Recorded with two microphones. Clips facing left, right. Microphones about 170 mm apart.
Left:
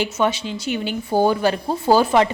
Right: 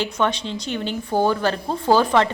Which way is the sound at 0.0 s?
5° left (ahead or behind).